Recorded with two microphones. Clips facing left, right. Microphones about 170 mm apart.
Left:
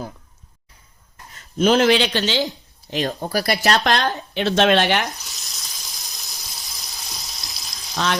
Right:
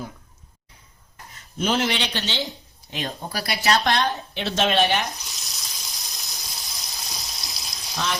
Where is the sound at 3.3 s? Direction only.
55° left (ahead or behind); by 5.0 s 80° left.